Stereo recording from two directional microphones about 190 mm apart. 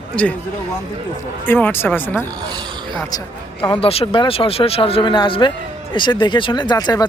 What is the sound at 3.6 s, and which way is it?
Speech, 30° left (ahead or behind).